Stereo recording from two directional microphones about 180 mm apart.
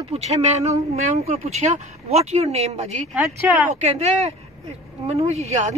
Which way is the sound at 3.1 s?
10° right (ahead or behind).